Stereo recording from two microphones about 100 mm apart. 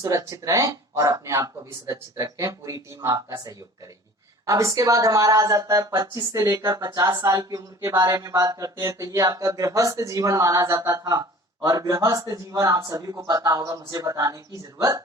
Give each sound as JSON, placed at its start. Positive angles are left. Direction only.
{"t": 0.0, "sound": "a woman's voice", "side_deg": -35}